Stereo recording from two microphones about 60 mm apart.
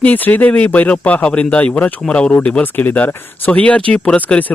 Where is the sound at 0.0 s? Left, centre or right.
Left.